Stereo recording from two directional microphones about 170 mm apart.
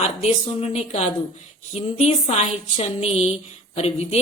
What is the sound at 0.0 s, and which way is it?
A woman's voice, 40° left (ahead or behind).